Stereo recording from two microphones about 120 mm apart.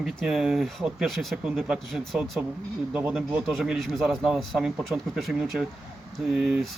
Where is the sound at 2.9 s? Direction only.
10° right (ahead or behind).